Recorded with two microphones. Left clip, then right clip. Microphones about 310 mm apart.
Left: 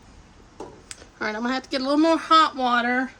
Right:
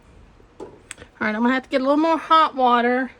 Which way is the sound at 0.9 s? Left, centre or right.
Right.